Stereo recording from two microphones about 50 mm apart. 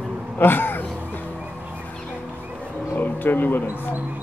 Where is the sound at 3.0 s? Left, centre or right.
Left.